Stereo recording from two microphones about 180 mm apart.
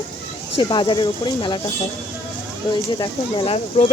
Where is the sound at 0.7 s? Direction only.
25° left (ahead or behind).